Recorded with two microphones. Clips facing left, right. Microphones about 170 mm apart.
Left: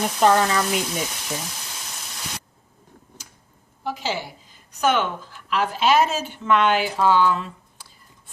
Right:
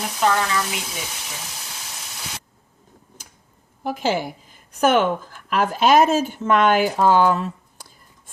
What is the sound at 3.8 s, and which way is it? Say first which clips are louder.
A woman's voice: right 5 dB; 50° right (ahead or behind).